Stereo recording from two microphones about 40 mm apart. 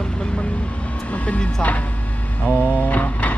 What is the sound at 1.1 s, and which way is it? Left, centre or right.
Vehicle, left.